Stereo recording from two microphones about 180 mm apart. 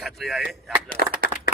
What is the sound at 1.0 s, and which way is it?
Speech, 60° right (ahead or behind).